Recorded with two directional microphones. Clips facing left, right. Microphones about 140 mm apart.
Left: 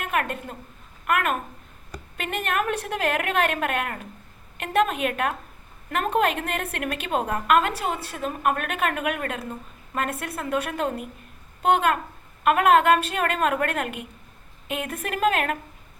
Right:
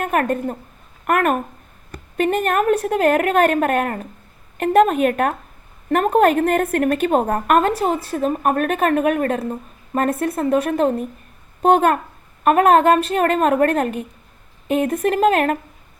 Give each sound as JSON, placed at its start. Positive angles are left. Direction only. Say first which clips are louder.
{"t": 0.0, "sound": "a woman's voice", "louder": "right 8 dB", "side_deg": -40}
{"t": 11.6, "sound": "a woman's voice", "louder": "right 6 dB", "side_deg": -40}